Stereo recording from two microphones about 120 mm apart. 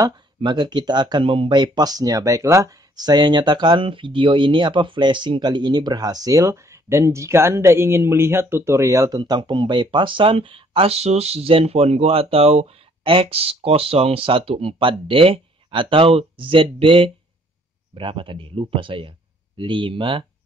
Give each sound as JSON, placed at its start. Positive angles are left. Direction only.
{"t": 0.4, "sound": "speech", "side_deg": -35}
{"t": 9.2, "sound": "speech", "side_deg": -40}